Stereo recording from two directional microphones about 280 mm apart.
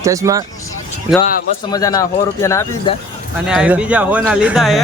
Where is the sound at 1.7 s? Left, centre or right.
Centre.